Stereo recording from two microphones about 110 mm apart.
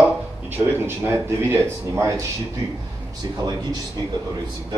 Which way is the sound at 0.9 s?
25° right (ahead or behind).